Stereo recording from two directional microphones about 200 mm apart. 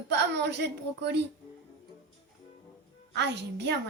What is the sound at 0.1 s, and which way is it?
A woman's voice, 60° right (ahead or behind).